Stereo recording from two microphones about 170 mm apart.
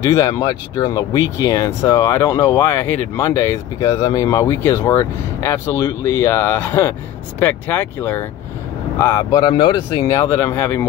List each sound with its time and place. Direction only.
0.0 s speech: 20° left (ahead or behind)